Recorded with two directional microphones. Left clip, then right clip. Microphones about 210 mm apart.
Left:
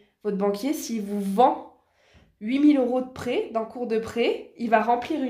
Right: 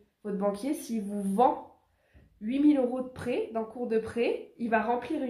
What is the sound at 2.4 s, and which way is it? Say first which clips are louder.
Speech: left 5 dB; 40° left (ahead or behind).